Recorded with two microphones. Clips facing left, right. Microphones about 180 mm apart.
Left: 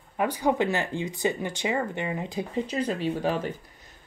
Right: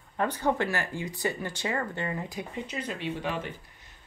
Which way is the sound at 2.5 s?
35° left (ahead or behind).